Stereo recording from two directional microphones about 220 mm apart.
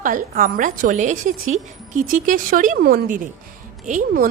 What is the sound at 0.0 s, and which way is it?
A woman's voice, 40° right (ahead or behind).